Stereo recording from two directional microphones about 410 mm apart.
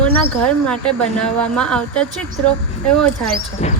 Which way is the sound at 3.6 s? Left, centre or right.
Centre.